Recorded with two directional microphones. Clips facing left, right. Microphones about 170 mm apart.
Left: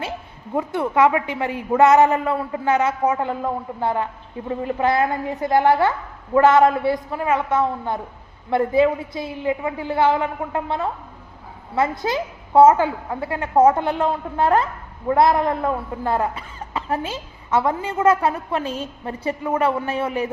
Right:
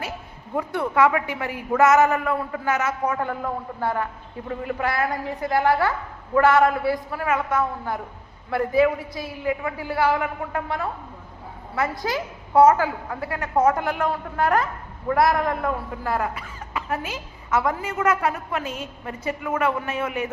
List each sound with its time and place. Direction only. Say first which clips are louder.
0.5 s a woman's voice: left 3 dB; 20° left (ahead or behind)